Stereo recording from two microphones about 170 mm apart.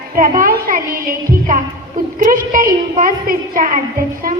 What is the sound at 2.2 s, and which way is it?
A woman's voice, 55° right (ahead or behind).